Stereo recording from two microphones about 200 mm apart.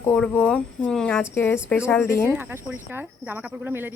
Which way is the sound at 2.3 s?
10° right (ahead or behind).